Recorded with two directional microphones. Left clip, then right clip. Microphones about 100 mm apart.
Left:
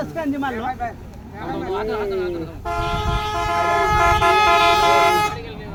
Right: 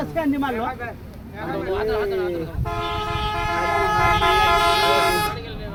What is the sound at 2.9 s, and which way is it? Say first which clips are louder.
Vehicle: left 2 dB; 10° left (ahead or behind).